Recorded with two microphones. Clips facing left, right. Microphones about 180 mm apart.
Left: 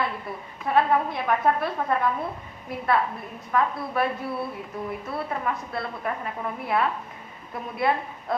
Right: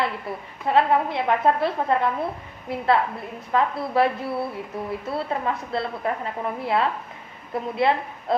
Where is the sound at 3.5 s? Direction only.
30° right (ahead or behind).